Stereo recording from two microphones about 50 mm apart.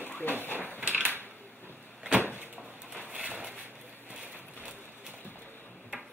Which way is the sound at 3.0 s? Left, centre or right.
Right.